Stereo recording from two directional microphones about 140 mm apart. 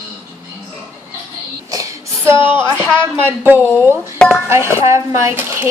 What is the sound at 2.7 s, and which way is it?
Speech, 15° right (ahead or behind).